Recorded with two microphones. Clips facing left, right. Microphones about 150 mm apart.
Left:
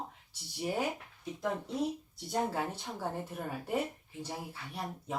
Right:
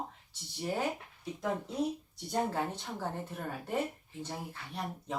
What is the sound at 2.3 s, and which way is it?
Speech, 5° left (ahead or behind).